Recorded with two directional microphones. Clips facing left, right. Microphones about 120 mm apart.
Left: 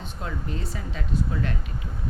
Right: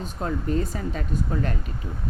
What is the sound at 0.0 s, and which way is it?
A woman's voice, 40° right (ahead or behind).